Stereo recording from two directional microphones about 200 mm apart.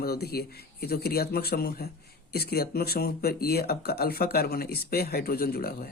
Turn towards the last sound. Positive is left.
turn(degrees=50)  # may be behind; listen again after turning